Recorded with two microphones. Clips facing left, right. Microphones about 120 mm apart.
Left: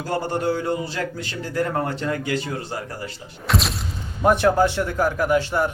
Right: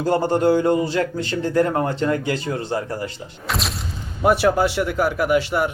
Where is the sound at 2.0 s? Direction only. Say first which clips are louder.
Right 3 dB; 35° right (ahead or behind).